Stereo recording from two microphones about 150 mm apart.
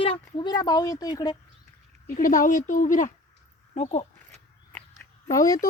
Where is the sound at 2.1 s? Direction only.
60° left (ahead or behind).